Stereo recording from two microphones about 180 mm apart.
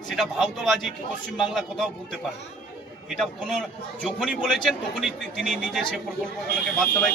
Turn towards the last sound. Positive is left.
turn(degrees=5)  # may be behind; listen again after turning